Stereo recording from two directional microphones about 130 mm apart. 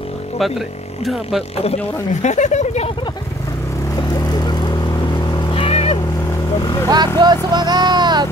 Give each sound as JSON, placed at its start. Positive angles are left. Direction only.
{"t": 1.0, "sound": "speech", "side_deg": 0}
{"t": 2.2, "sound": "speech", "side_deg": 65}
{"t": 5.5, "sound": "vehicle", "side_deg": 45}
{"t": 6.6, "sound": "vehicle", "side_deg": 30}
{"t": 7.2, "sound": "speech", "side_deg": -35}